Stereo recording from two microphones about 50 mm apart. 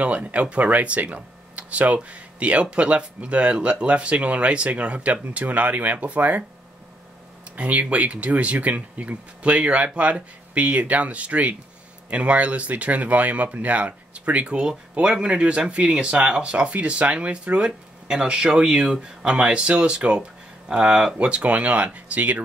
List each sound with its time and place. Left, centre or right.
0.0 s speech: right
7.5 s speech: right
21.4 s speech: right